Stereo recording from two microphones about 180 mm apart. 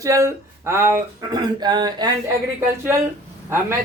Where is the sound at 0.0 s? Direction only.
15° right (ahead or behind).